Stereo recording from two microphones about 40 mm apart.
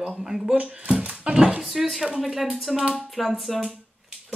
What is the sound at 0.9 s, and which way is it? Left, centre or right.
Dog, right.